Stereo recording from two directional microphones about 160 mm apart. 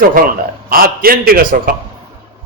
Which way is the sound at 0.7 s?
70° right (ahead or behind).